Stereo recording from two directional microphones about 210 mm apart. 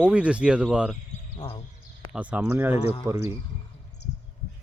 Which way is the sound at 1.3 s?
25° left (ahead or behind).